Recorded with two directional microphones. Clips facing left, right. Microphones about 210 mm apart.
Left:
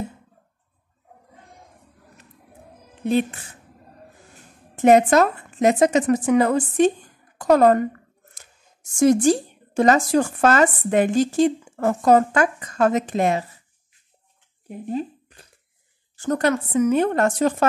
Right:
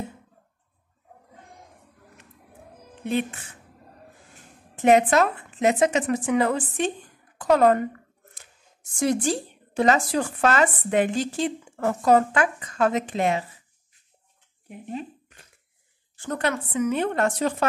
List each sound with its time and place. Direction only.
3.1 s a woman's voice: 35° left (ahead or behind)
4.8 s a woman's voice: 40° left (ahead or behind)
8.9 s speech: 45° left (ahead or behind)
14.7 s speech: 35° left (ahead or behind)